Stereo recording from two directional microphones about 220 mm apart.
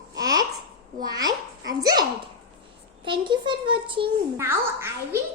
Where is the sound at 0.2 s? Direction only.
15° right (ahead or behind).